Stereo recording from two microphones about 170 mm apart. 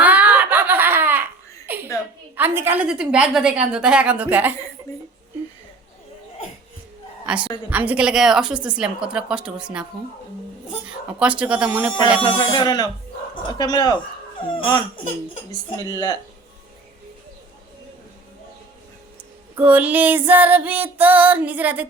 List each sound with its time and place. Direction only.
0.0 s giggle: 10° right (ahead or behind)
2.3 s music: 10° right (ahead or behind)
7.3 s a woman's voice: 5° right (ahead or behind)
10.8 s music: 5° right (ahead or behind)
12.2 s speech: 25° left (ahead or behind)
15.8 s speech: 20° left (ahead or behind)
19.5 s music: 10° right (ahead or behind)